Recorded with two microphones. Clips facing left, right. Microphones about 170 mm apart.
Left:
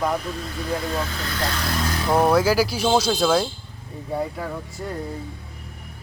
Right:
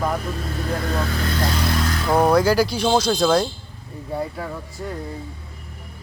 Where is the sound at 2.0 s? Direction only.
Centre (ahead or behind).